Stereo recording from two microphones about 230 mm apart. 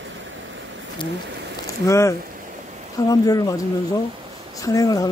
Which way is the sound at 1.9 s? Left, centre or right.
Centre.